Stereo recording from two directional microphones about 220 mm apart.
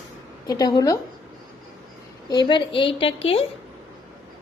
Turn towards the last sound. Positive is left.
turn(degrees=25)  # may be behind; listen again after turning